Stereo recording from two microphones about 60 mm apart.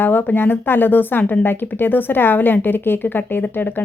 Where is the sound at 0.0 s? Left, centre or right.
Left.